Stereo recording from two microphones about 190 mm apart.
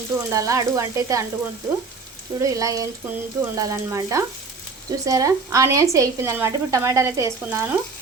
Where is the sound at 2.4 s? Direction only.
15° right (ahead or behind).